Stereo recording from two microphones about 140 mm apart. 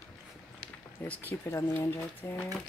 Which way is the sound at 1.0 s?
10° left (ahead or behind).